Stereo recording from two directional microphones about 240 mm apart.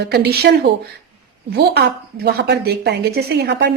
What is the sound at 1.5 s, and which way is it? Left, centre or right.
A woman's voice, right.